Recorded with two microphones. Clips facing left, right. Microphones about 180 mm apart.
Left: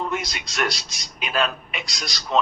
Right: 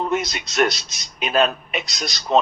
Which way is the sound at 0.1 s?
20° right (ahead or behind).